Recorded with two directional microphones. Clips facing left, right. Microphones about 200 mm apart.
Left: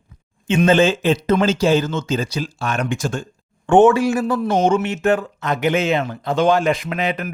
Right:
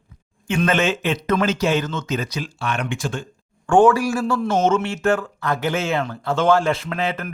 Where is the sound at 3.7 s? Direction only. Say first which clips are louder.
Left 3 dB; 20° left (ahead or behind).